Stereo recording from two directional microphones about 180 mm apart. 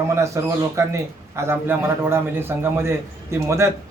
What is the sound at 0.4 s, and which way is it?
Speech, 15° right (ahead or behind).